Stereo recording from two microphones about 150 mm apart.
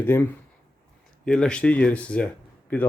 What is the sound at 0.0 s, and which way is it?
Speech, 15° left (ahead or behind).